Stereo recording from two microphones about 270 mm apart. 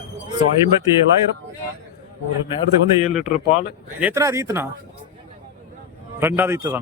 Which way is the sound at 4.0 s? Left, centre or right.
Centre.